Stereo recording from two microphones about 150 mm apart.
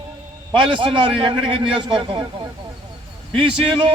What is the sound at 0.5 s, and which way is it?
A man's voice, 35° right (ahead or behind).